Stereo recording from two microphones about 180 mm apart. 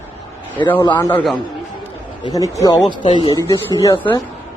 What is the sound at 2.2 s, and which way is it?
Speech, 20° left (ahead or behind).